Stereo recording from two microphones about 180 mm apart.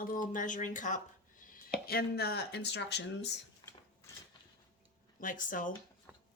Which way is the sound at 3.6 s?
20° left (ahead or behind).